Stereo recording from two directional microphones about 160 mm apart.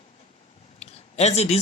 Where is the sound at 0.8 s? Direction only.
45° left (ahead or behind).